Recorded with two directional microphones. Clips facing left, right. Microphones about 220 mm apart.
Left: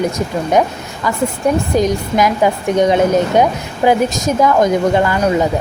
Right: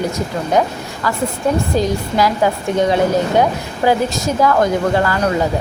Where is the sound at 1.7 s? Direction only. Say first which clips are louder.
Left 2 dB; 20° left (ahead or behind).